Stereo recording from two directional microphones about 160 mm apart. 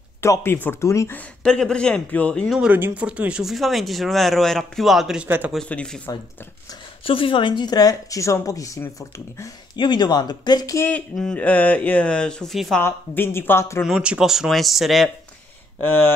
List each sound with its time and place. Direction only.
0.2 s speech: 15° left (ahead or behind)
2.7 s speech: 10° right (ahead or behind)
5.6 s speech: 5° left (ahead or behind)
7.1 s speech: 35° left (ahead or behind)
10.9 s speech: 5° left (ahead or behind)
12.8 s speech: 15° left (ahead or behind)
13.8 s speech: 5° right (ahead or behind)
15.8 s speech: 15° left (ahead or behind)